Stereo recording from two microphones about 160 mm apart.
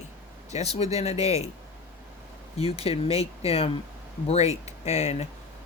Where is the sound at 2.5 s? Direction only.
40° left (ahead or behind).